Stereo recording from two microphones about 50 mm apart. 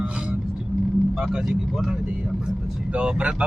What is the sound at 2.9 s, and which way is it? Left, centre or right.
Speech, right.